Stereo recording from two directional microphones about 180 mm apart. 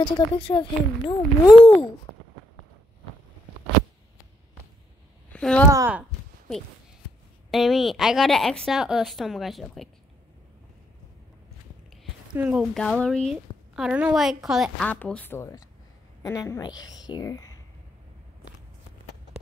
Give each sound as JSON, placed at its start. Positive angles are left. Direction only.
{"t": 0.4, "sound": "speech", "side_deg": 25}
{"t": 5.3, "sound": "speech", "side_deg": 5}
{"t": 5.7, "sound": "speech", "side_deg": -15}
{"t": 7.5, "sound": "a woman's voice", "side_deg": 0}
{"t": 12.4, "sound": "a woman's voice", "side_deg": -5}